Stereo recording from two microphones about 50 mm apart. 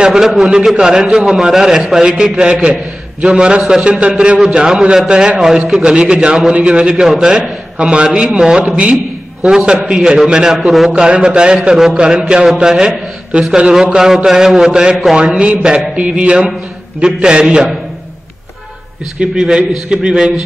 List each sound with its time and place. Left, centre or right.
0.0 s a man's voice: centre
8.9 s a sound: centre
9.6 s a man's voice: right
19.1 s a man's voice: centre